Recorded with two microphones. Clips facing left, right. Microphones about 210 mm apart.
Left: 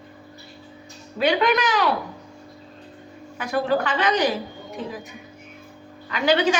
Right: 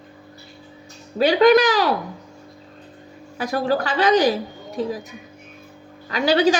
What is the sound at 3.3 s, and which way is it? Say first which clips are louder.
A woman's voice: right 1 dB; 35° right (ahead or behind).